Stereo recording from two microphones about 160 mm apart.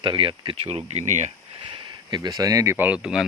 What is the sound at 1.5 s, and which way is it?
Speech, 30° right (ahead or behind).